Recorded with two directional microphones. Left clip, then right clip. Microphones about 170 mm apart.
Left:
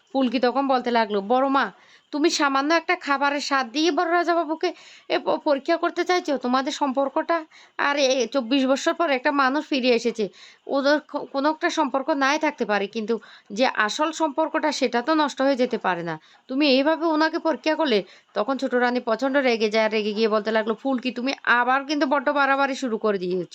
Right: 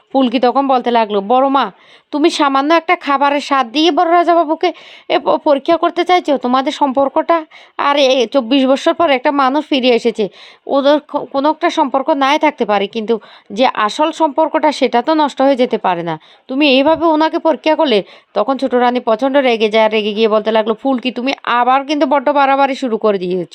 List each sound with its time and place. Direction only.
0.1 s speech: 25° right (ahead or behind)